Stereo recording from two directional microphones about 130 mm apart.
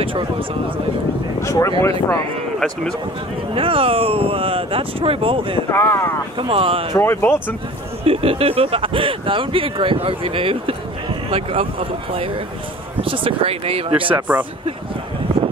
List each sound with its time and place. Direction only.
0.0 s speech: 40° right (ahead or behind)
1.4 s speech: 25° left (ahead or behind)
3.5 s speech: 45° right (ahead or behind)
5.7 s speech: 20° left (ahead or behind)
6.4 s speech: 45° right (ahead or behind)
7.0 s speech: 15° left (ahead or behind)
8.0 s speech: 45° right (ahead or behind)
13.0 s speech: 45° right (ahead or behind)
14.1 s speech: 10° right (ahead or behind)